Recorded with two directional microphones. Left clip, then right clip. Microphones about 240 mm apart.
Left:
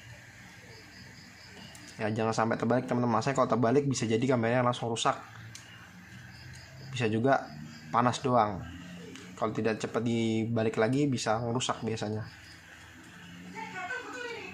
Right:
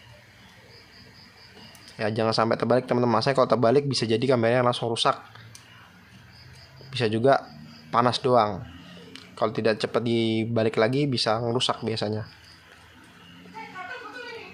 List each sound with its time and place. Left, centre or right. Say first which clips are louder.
2.0 s speech: right 6 dB; centre
7.0 s speech: right 6 dB; centre